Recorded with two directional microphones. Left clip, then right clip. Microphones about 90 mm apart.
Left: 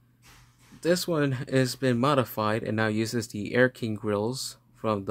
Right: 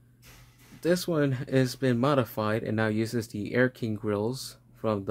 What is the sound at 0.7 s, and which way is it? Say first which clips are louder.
Speech: left 1 dB; 15° left (ahead or behind).